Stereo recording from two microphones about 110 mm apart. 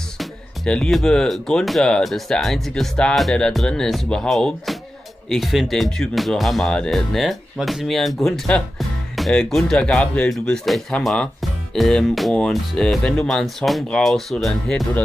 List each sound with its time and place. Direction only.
0.2 s speech: 5° left (ahead or behind)